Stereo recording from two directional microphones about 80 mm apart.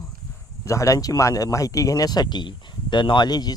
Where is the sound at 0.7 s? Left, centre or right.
Left.